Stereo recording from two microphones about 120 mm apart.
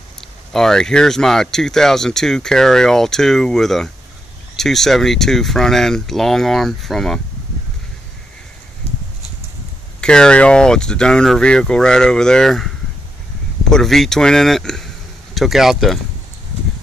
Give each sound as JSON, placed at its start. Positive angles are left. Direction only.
{"t": 0.5, "sound": "speech", "side_deg": 5}
{"t": 8.8, "sound": "a sound", "side_deg": 60}
{"t": 9.9, "sound": "speech", "side_deg": 5}